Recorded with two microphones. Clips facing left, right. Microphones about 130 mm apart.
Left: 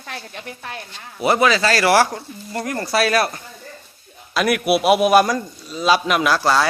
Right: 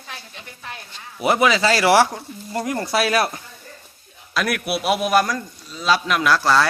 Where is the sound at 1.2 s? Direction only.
10° right (ahead or behind).